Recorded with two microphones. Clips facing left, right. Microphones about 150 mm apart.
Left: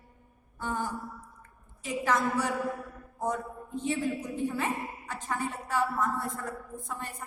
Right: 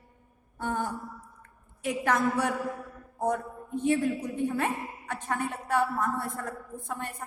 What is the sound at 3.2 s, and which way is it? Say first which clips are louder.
A man's voice: right 3 dB; 60° right (ahead or behind).